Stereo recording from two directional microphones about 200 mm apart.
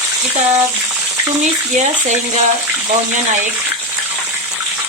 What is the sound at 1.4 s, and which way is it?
Speech, 35° right (ahead or behind).